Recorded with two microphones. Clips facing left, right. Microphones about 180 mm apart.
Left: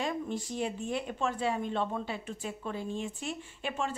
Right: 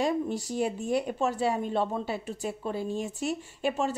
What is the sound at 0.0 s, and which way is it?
Speech, 40° right (ahead or behind).